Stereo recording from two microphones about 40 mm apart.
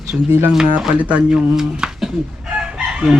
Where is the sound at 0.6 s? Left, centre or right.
Centre.